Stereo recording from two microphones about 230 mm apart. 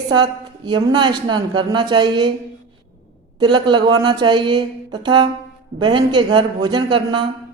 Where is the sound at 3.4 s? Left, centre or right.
Centre.